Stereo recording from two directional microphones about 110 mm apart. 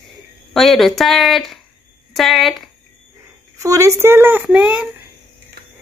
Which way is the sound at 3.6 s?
30° right (ahead or behind).